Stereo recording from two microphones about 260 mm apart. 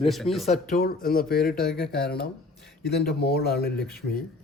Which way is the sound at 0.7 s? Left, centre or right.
Left.